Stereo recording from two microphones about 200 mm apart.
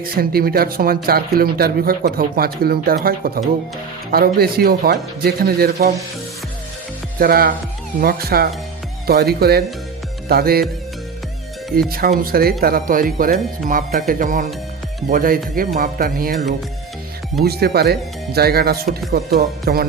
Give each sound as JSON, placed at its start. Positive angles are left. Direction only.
{"t": 0.0, "sound": "speech", "side_deg": -50}
{"t": 7.2, "sound": "speech", "side_deg": -50}
{"t": 11.8, "sound": "speech", "side_deg": -45}